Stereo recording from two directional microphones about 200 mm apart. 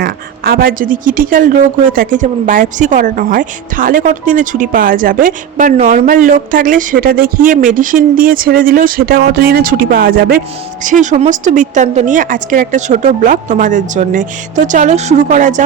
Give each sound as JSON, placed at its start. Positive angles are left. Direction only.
{"t": 0.0, "sound": "a woman's voice", "side_deg": -45}